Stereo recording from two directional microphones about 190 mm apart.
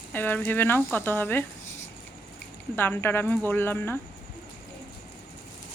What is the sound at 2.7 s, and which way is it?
A woman's voice, 10° left (ahead or behind).